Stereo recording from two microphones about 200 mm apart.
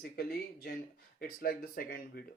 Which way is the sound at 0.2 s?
50° left (ahead or behind).